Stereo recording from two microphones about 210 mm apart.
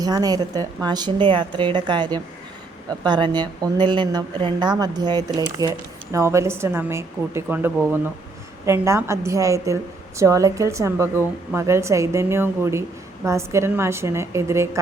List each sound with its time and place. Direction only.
0.0 s a woman's voice: 20° right (ahead or behind)